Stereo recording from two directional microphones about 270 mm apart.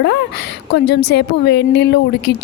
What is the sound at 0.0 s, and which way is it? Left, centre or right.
Speech, left.